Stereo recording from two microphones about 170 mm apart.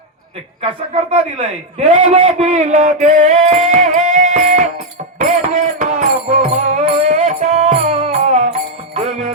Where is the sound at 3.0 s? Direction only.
45° right (ahead or behind).